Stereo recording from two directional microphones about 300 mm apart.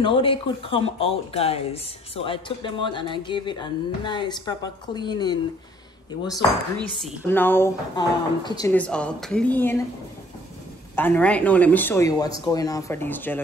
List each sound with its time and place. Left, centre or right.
0.0 s speech: centre
6.3 s a woman's voice: centre
11.0 s a woman's voice: centre